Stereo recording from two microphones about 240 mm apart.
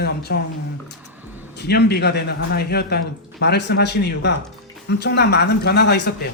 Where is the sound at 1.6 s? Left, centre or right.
Left.